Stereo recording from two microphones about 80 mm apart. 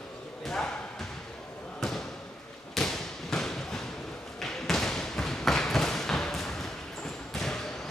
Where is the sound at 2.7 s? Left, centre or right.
Centre.